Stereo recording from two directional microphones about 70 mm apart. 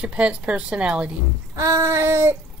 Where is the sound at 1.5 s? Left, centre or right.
Right.